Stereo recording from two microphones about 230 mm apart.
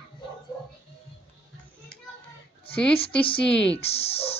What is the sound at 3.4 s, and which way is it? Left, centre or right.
Speech, centre.